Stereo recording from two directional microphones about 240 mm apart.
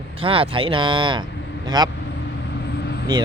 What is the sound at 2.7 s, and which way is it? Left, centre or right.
Vehicle, left.